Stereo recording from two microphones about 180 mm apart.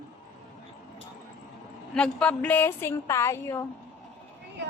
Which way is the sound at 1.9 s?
5° left (ahead or behind).